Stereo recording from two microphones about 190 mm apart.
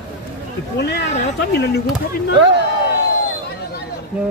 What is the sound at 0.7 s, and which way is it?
Speech, 65° left (ahead or behind).